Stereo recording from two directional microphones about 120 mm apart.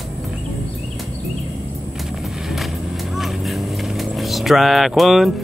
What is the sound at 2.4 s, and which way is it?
Vehicle, centre (ahead or behind).